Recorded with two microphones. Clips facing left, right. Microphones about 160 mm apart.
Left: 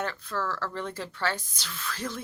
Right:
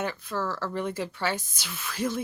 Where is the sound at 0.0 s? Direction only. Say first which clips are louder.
Right 1 dB; 15° right (ahead or behind).